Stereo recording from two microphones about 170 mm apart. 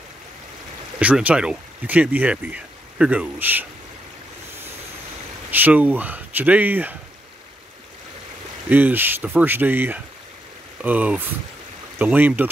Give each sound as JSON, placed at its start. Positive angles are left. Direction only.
{"t": 0.9, "sound": "speech", "side_deg": -5}
{"t": 5.5, "sound": "speech", "side_deg": -10}
{"t": 8.6, "sound": "speech", "side_deg": -10}